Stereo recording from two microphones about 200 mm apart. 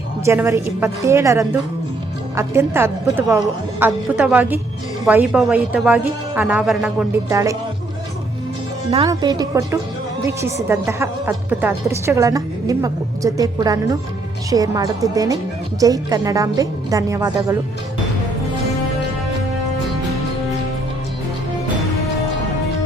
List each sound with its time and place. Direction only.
0.3 s a woman's voice: 10° right (ahead or behind)
8.9 s a woman's voice: 25° right (ahead or behind)